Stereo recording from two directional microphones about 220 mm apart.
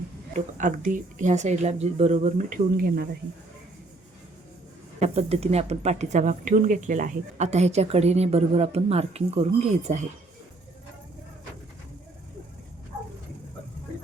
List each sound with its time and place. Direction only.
0.3 s speech: 35° right (ahead or behind)
4.9 s speech: 30° right (ahead or behind)